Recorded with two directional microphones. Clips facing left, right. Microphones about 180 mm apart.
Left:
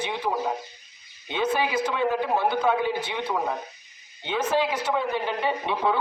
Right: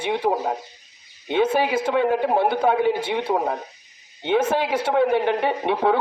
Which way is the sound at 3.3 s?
40° right (ahead or behind).